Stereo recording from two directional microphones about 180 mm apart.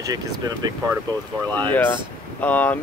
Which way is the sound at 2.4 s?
10° left (ahead or behind).